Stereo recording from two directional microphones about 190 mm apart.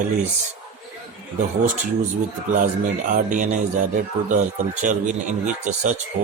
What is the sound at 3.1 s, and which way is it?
Speech, 45° right (ahead or behind).